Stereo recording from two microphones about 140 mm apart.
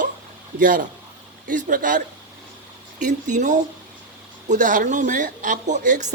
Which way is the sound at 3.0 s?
65° right (ahead or behind).